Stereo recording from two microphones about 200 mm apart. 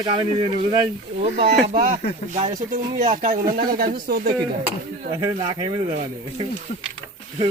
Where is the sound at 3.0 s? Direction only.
35° right (ahead or behind).